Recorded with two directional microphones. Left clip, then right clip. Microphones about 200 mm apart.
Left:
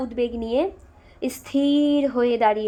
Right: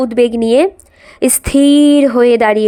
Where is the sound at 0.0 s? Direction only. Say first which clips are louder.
Right 14 dB; 45° right (ahead or behind).